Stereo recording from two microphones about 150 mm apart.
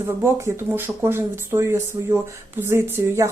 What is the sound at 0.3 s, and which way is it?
Speech, 20° right (ahead or behind).